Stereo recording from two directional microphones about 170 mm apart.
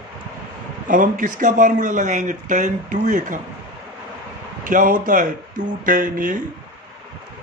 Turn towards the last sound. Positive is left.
turn(degrees=-50)  # may be behind; listen again after turning